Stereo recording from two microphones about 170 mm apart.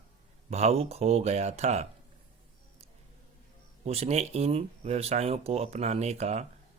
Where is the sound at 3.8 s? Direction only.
40° right (ahead or behind).